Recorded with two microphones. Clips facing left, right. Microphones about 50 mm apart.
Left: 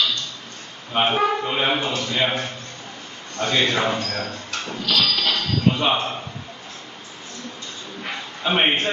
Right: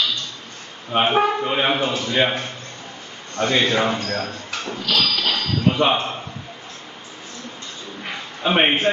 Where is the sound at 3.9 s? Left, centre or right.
Right.